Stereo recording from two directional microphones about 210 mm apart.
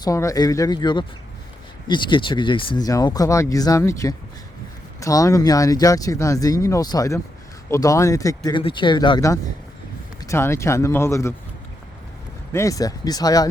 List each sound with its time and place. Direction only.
0.0 s speech: 15° left (ahead or behind)
12.5 s speech: 15° left (ahead or behind)